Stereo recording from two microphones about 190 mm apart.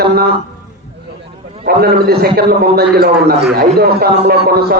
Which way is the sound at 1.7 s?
55° right (ahead or behind).